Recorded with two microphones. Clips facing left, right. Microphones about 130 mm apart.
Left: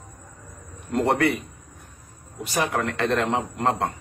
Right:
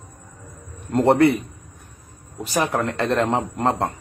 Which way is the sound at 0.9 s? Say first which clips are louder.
Right 6 dB; 35° right (ahead or behind).